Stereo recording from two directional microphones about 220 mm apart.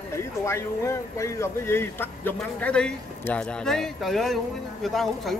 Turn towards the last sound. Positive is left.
turn(degrees=0)  # may be behind; listen again after turning